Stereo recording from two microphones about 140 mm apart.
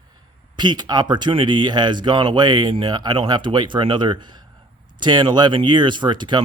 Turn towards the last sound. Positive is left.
turn(degrees=-35)  # may be behind; listen again after turning